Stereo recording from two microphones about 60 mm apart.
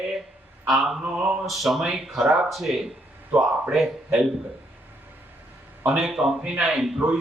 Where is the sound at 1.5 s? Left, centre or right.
Centre.